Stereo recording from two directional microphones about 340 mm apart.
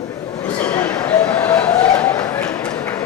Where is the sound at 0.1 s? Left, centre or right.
Centre.